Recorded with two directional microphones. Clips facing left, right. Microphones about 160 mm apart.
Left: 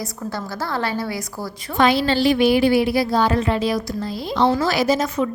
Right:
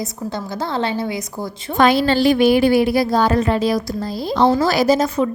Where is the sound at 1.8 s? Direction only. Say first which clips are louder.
Right 3 dB; 50° right (ahead or behind).